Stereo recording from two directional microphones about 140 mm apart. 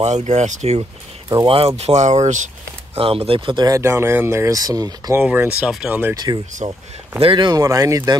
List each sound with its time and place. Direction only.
0.0 s speech: 50° right (ahead or behind)
1.3 s speech: 35° right (ahead or behind)
1.8 s speech: 55° right (ahead or behind)
3.0 s speech: 45° right (ahead or behind); by 5.2 s 25° right (ahead or behind)
5.2 s speech: 10° right (ahead or behind)
6.1 s speech: 30° right (ahead or behind)